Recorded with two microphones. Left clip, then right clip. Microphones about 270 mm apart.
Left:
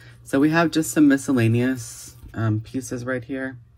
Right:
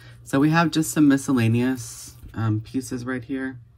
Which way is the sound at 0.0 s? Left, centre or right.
Centre.